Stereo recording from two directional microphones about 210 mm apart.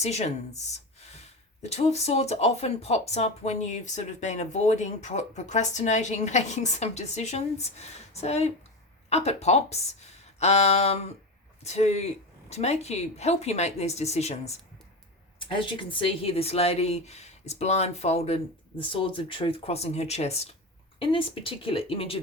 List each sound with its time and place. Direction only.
0.0 s speech: 30° left (ahead or behind)